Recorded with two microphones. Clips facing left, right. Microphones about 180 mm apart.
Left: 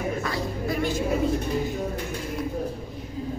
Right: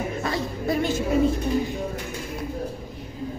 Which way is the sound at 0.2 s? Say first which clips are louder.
Right 1 dB; 25° right (ahead or behind).